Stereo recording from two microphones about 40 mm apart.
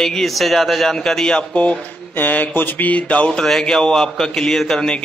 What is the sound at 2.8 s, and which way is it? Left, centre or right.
Speech, left.